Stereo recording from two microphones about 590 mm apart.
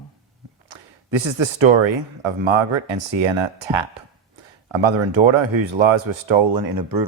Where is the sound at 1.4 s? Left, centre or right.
Right.